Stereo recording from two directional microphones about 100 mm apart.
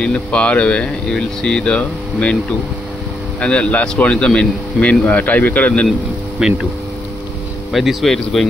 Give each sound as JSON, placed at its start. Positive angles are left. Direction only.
{"t": 0.0, "sound": "speech", "side_deg": 10}
{"t": 3.3, "sound": "speech", "side_deg": 10}
{"t": 6.4, "sound": "speech", "side_deg": -5}
{"t": 7.7, "sound": "speech", "side_deg": 0}